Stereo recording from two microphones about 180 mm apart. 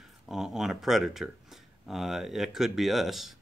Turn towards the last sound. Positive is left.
turn(degrees=0)  # may be behind; listen again after turning